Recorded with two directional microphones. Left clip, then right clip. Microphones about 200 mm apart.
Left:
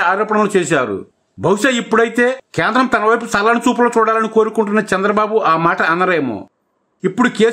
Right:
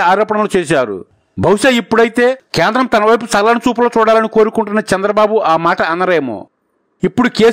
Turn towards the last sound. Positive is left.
turn(degrees=-40)  # may be behind; listen again after turning